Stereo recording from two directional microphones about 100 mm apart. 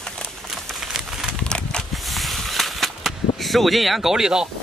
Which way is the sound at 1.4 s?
10° left (ahead or behind).